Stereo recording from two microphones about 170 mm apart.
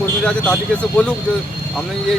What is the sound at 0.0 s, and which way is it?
Speech, 5° left (ahead or behind).